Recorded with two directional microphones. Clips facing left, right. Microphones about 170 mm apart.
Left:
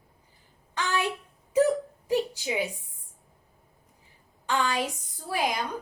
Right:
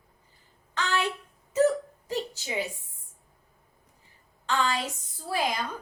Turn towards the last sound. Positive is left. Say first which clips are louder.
# even
turn(degrees=15)  # may be behind; listen again after turning